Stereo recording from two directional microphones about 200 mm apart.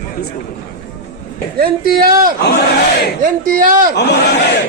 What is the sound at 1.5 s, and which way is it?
Speech, 50° right (ahead or behind).